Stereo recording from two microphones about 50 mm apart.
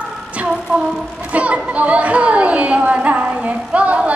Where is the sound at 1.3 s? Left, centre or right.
Right.